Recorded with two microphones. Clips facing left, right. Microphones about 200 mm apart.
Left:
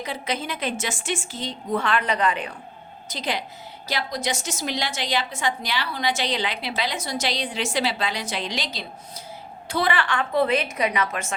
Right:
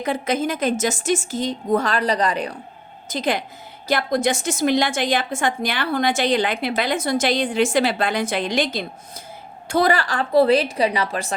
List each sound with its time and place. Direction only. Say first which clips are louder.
0.0 s a woman's voice: right 7 dB; 50° right (ahead or behind)
3.1 s a woman's voice: right 6 dB; 50° right (ahead or behind); by 11.3 s 35° right (ahead or behind)